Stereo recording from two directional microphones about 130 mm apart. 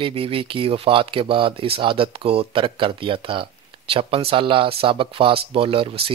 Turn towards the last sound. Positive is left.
turn(degrees=-45)  # may be behind; listen again after turning